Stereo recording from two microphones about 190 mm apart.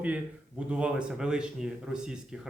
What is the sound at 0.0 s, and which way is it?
Speech, 5° right (ahead or behind).